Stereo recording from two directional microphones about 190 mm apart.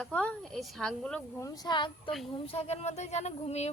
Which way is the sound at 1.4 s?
20° left (ahead or behind).